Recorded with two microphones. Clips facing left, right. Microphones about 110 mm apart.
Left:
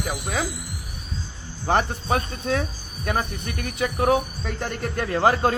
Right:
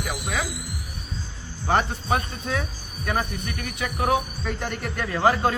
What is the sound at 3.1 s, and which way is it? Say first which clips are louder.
Speech: left 1 dB; 25° left (ahead or behind).